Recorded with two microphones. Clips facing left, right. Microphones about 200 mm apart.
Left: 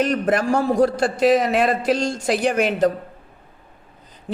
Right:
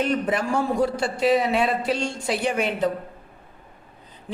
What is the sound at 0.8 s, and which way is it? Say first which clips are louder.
A man's voice: left 5 dB; 90° left.